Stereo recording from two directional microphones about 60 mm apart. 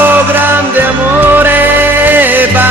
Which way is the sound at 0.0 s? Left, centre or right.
Right.